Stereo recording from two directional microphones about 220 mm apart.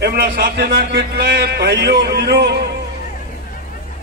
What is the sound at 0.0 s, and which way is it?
A man's voice, 45° right (ahead or behind).